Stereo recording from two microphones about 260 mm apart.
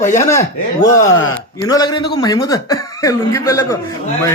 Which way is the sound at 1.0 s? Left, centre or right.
Left.